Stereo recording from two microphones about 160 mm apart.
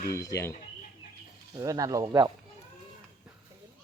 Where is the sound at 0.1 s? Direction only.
20° left (ahead or behind).